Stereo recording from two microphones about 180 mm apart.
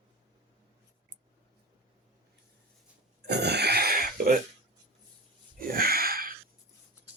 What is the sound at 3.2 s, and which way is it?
Burping, 65° right (ahead or behind).